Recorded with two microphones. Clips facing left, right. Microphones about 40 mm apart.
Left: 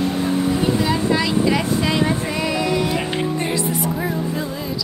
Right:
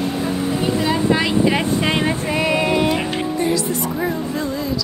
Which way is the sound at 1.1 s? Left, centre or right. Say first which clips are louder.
Right 1 dB; right.